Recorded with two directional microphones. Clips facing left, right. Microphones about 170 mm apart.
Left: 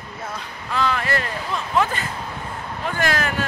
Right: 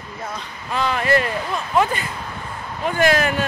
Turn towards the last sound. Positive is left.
turn(degrees=-20)  # may be behind; listen again after turning